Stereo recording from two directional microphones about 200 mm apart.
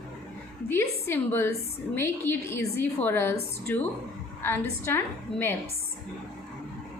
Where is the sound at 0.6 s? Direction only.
10° left (ahead or behind).